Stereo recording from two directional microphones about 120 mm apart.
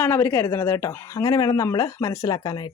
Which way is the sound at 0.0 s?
15° left (ahead or behind).